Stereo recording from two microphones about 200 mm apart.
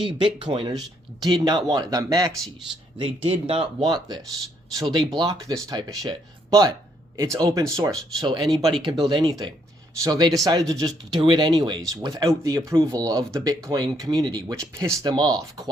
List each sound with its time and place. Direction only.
0.0 s speech: 25° right (ahead or behind)